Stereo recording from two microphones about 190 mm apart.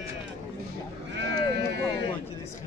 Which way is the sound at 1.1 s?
70° right (ahead or behind).